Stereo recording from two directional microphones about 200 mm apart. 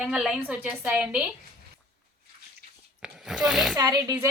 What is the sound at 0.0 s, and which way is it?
A woman's voice, 5° right (ahead or behind).